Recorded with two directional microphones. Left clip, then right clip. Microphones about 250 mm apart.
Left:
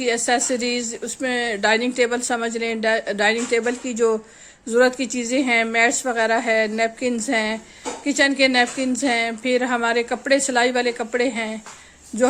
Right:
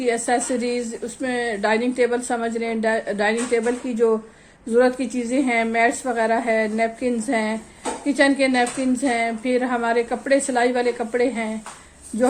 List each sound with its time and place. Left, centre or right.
0.0 s a woman's voice: left